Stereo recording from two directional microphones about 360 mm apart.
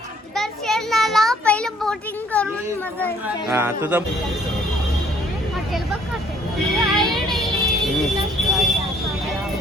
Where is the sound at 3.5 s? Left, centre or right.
Centre.